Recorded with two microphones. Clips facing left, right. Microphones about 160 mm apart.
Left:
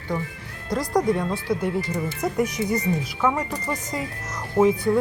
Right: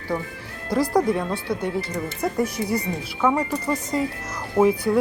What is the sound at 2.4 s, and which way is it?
Speech, 30° right (ahead or behind).